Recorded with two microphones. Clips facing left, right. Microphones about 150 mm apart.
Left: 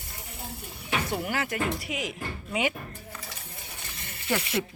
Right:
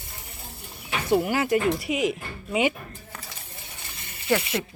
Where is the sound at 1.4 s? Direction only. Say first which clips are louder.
Right 7 dB; 25° right (ahead or behind).